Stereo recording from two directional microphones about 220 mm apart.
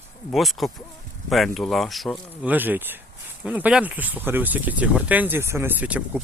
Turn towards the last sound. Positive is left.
turn(degrees=-5)  # may be behind; listen again after turning